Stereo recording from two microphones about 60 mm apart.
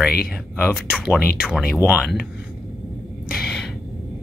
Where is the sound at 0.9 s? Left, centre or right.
Centre.